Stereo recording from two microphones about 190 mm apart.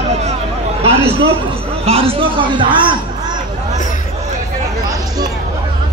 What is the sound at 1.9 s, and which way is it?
A man's voice, 30° right (ahead or behind).